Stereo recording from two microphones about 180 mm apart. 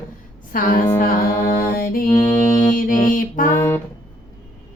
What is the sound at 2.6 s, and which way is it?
Music, 50° left (ahead or behind).